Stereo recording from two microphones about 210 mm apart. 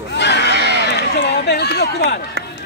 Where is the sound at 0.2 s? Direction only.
55° left (ahead or behind).